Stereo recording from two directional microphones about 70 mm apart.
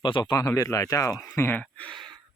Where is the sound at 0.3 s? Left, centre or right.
Left.